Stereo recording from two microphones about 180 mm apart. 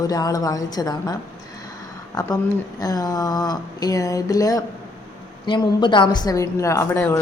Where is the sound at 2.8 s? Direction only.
20° left (ahead or behind).